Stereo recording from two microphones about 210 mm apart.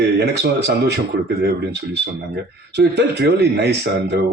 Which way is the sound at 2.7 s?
55° right (ahead or behind).